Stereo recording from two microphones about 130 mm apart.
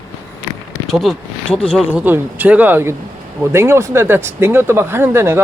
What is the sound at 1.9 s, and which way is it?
A man's voice, 15° right (ahead or behind).